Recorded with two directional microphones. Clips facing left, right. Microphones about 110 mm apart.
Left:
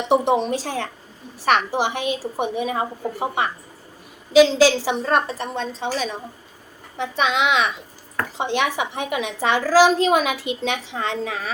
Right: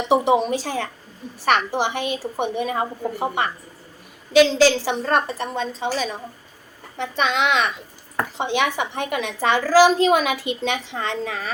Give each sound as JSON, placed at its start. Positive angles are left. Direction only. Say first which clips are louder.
{"t": 0.1, "sound": "a woman's voice", "louder": "right 1 dB", "side_deg": -5}